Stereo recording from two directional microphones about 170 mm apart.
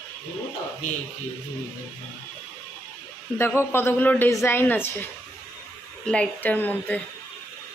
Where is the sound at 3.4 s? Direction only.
15° left (ahead or behind).